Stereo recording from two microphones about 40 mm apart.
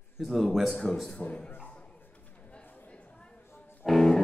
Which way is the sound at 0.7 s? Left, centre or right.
Centre.